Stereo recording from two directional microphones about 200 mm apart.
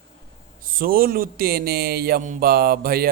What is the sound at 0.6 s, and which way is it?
Speech, 45° right (ahead or behind).